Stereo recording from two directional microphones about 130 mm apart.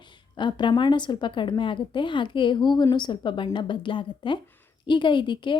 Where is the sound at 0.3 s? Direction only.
35° left (ahead or behind).